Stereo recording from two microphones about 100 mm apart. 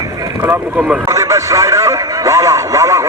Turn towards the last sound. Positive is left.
turn(degrees=-30)  # may be behind; listen again after turning